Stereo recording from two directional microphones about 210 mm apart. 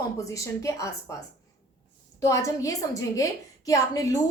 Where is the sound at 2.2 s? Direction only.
15° left (ahead or behind).